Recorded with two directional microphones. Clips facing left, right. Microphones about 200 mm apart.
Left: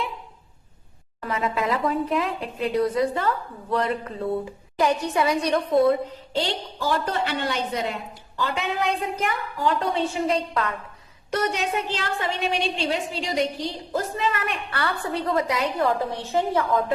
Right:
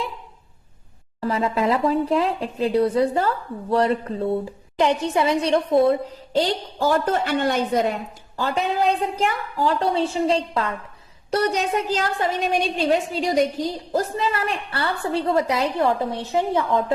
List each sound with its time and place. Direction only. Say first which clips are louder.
1.2 s a woman's voice: right 4 dB; 30° right (ahead or behind)
6.3 s a woman's voice: right 5 dB; 40° right (ahead or behind)
14.2 s a woman's voice: right 2 dB; 30° right (ahead or behind)